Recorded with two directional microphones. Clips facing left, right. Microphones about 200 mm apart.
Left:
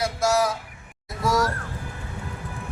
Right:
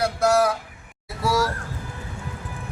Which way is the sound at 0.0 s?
60° right (ahead or behind).